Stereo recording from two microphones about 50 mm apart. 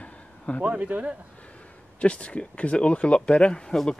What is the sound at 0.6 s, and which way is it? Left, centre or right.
Speech, right.